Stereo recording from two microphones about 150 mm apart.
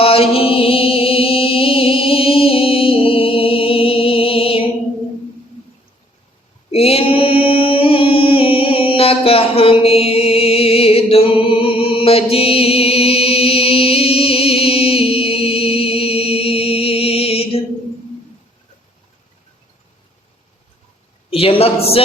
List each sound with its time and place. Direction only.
0.0 s music: 40° left (ahead or behind)
6.7 s mantra: 40° left (ahead or behind)
21.2 s a sound: 40° left (ahead or behind)